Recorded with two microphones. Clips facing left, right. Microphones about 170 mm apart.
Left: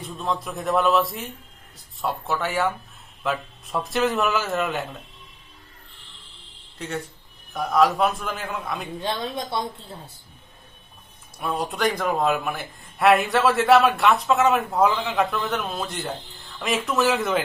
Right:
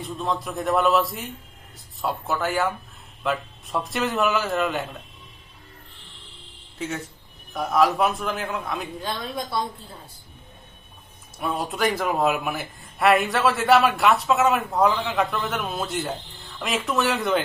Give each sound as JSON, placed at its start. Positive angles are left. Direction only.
{"t": 0.0, "sound": "speech", "side_deg": 0}
{"t": 7.5, "sound": "speech", "side_deg": 0}
{"t": 9.0, "sound": "a woman's voice", "side_deg": 25}
{"t": 11.3, "sound": "speech", "side_deg": 0}